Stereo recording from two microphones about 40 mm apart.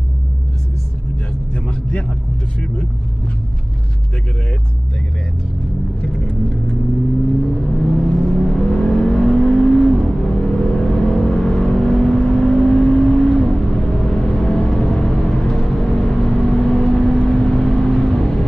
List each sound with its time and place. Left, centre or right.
1.5 s vehicle: left
7.5 s vehicle: centre